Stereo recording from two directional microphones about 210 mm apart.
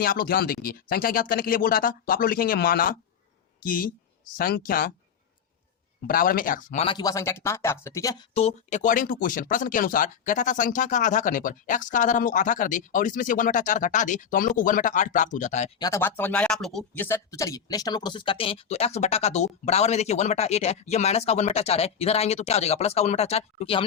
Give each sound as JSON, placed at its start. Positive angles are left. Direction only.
{"t": 0.0, "sound": "speech", "side_deg": 45}
{"t": 6.1, "sound": "speech", "side_deg": 40}
{"t": 6.8, "sound": "speech", "side_deg": 20}
{"t": 15.8, "sound": "speech", "side_deg": 10}